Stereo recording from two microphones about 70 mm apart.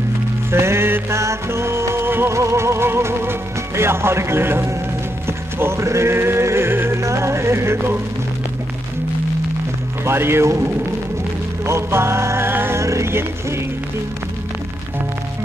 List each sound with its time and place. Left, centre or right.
0.5 s music: right
5.6 s speech: right
7.0 s music: right
10.0 s music: right
11.6 s music: right
12.8 s a sound: right